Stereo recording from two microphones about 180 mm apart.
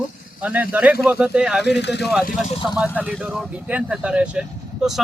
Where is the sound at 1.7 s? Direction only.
70° left (ahead or behind).